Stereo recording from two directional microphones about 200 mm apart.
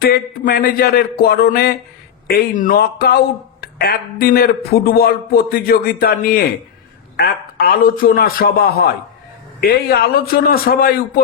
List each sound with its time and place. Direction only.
0.0 s a man's voice: 50° left (ahead or behind)